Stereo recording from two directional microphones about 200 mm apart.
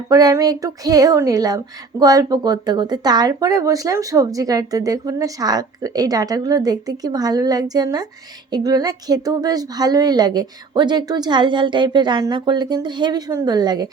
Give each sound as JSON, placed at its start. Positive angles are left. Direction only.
{"t": 0.1, "sound": "speech", "side_deg": -20}